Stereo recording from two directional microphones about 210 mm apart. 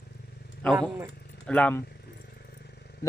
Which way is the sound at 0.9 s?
10° right (ahead or behind).